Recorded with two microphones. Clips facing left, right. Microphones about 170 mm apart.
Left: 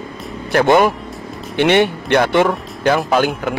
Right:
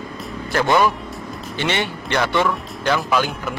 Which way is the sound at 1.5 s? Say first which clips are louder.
Left 10 dB; 60° left (ahead or behind).